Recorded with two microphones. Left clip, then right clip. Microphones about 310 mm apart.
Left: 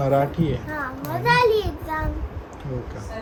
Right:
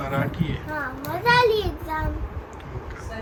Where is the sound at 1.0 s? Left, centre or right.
Centre.